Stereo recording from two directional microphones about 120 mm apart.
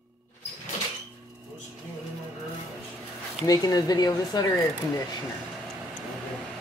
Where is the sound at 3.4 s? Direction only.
30° left (ahead or behind).